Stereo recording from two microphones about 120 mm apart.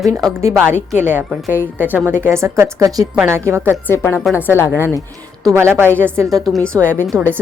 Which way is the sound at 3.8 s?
20° left (ahead or behind).